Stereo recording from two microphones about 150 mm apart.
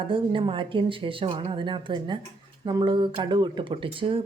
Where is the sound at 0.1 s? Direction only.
35° right (ahead or behind).